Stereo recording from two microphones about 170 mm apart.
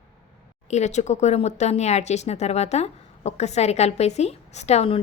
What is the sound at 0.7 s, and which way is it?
Speech, 40° left (ahead or behind).